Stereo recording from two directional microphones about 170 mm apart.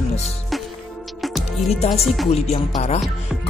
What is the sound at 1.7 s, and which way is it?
Speech, 35° left (ahead or behind).